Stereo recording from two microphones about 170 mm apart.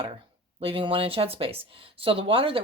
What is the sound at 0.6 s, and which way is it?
Speech, 30° right (ahead or behind).